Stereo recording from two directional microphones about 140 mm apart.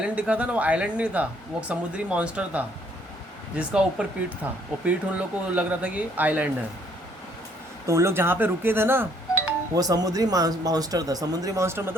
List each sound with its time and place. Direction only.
0.0 s speech: 10° right (ahead or behind)
7.9 s speech: 20° right (ahead or behind)
9.7 s speech: 25° right (ahead or behind)